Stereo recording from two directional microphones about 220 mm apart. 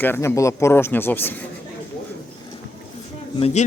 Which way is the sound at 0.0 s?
10° left (ahead or behind).